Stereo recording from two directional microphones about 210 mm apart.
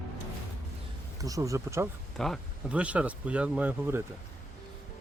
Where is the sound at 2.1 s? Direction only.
Centre (ahead or behind).